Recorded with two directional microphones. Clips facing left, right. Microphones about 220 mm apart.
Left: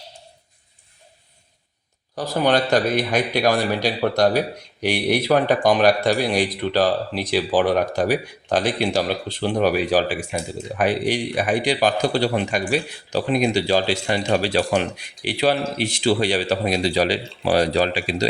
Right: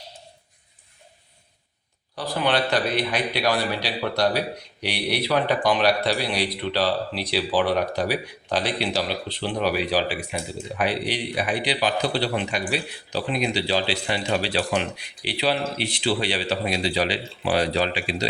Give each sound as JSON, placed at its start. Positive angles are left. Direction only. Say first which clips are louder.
{"t": 2.1, "sound": "a man's voice", "louder": "left 4 dB", "side_deg": 45}